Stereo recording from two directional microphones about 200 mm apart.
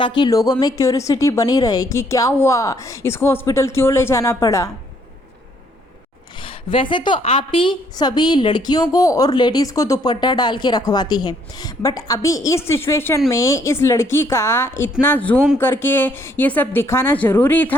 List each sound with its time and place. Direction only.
0.2 s a woman's voice: 20° left (ahead or behind)
6.4 s a woman's voice: 25° left (ahead or behind); by 17.7 s 10° left (ahead or behind)